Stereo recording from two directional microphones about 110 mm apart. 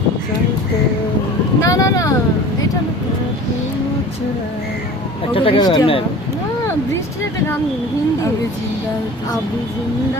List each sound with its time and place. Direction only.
1.6 s vehicle: 30° left (ahead or behind)
5.3 s a sound: 55° left (ahead or behind)
5.6 s speech: 50° left (ahead or behind)